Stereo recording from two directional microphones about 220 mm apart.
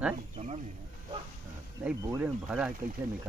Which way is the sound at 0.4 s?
30° right (ahead or behind).